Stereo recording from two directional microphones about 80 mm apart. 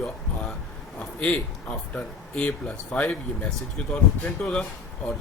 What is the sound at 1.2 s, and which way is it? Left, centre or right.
Speech, centre.